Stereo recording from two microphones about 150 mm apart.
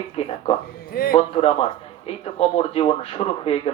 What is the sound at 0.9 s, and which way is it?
Speech, 75° left (ahead or behind).